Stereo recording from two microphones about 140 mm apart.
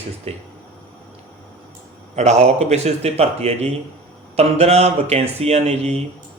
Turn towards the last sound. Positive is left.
turn(degrees=-50)  # may be behind; listen again after turning